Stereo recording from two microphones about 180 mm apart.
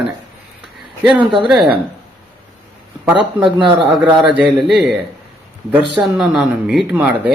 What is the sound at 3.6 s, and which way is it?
Speech, 30° right (ahead or behind).